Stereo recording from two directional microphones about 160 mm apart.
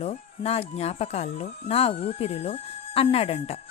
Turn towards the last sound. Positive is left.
turn(degrees=40)  # may be behind; listen again after turning